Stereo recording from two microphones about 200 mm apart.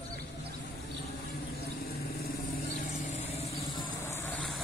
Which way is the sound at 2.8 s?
35° left (ahead or behind).